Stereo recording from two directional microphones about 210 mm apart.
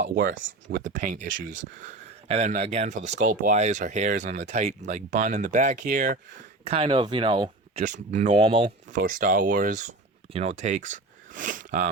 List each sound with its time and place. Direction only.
0.1 s speech: 40° right (ahead or behind)
0.4 s speech: 60° right (ahead or behind)
0.9 s speech: 40° right (ahead or behind)
6.7 s speech: 25° right (ahead or behind)
8.9 s speech: 40° right (ahead or behind)